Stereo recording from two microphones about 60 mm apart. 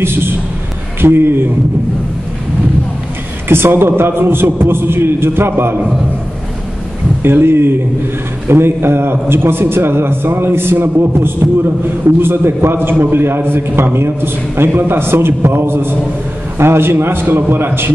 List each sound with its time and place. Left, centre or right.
0.0 s a man's voice: right
3.4 s a man's voice: right
7.2 s a man's voice: right